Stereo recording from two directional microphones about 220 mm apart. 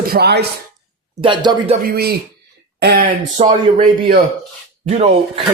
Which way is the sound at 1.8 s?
45° right (ahead or behind).